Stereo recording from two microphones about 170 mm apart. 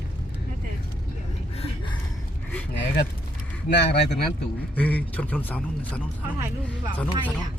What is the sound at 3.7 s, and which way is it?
Speech, 75° left (ahead or behind).